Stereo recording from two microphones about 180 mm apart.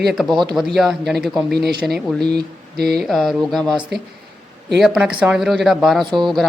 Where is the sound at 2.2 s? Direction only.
60° right (ahead or behind).